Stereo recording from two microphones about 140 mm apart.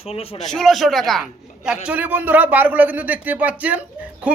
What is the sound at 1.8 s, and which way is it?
Speech, 10° right (ahead or behind).